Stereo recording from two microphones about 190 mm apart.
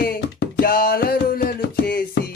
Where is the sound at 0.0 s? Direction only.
60° left (ahead or behind).